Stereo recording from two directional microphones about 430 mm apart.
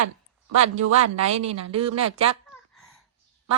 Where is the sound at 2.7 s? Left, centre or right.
Left.